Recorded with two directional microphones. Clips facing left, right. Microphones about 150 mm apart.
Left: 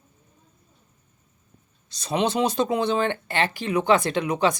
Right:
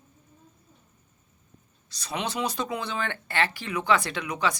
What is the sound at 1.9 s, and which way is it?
Speech, 25° left (ahead or behind).